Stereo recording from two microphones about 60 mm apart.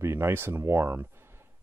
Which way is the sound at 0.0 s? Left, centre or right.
Right.